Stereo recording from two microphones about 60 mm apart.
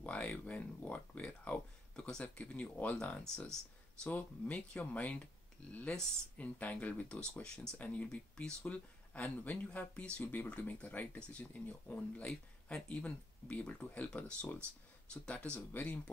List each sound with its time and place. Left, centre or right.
0.0 s speech: left
2.0 s speech: centre
2.2 s speech: left
10.2 s speech: left